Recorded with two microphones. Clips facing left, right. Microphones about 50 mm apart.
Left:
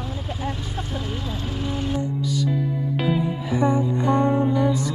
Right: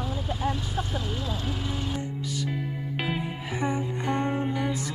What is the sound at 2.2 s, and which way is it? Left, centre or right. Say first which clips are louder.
Music: left 7 dB; right.